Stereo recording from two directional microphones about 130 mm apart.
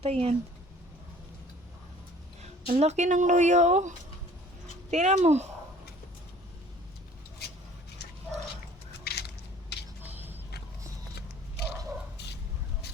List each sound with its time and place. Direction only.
0.0 s speech: 50° right (ahead or behind)
2.6 s speech: 60° right (ahead or behind)
10.0 s a sound: 15° right (ahead or behind)